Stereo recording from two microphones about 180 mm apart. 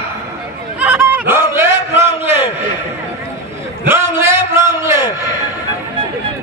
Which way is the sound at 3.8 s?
15° right (ahead or behind).